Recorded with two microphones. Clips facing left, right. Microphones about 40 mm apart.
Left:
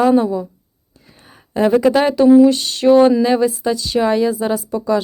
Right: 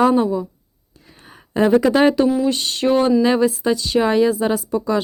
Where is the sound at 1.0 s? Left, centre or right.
Right.